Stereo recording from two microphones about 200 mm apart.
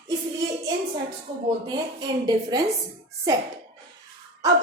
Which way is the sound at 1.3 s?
20° right (ahead or behind).